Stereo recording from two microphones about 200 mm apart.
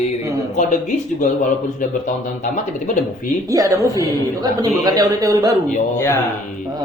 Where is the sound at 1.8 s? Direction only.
40° left (ahead or behind).